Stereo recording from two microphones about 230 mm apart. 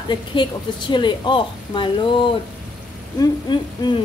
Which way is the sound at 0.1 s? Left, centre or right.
Centre.